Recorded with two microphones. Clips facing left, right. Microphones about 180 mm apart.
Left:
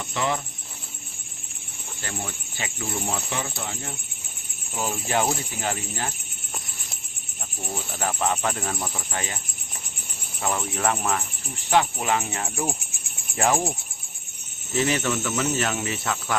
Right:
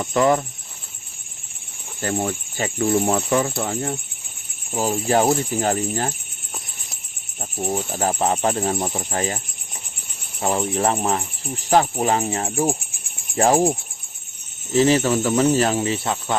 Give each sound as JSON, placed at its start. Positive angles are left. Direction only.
{"t": 0.0, "sound": "speech", "side_deg": -45}
{"t": 2.0, "sound": "speech", "side_deg": -45}
{"t": 7.6, "sound": "speech", "side_deg": -40}
{"t": 10.4, "sound": "speech", "side_deg": -30}
{"t": 14.8, "sound": "speech", "side_deg": -35}